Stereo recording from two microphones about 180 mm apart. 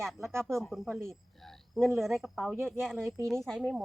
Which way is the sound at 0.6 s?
Centre (ahead or behind).